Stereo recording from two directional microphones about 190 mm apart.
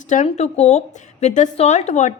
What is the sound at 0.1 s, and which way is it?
A woman's voice, 40° left (ahead or behind).